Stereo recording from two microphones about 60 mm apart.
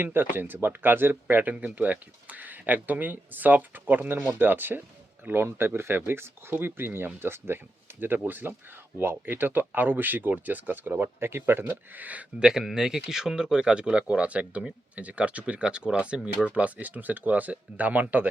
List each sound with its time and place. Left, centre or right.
0.0 s speech: right
12.4 s speech: centre; by 18.3 s right